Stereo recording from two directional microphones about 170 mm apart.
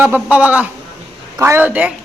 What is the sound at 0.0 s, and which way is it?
A woman's voice, 10° right (ahead or behind).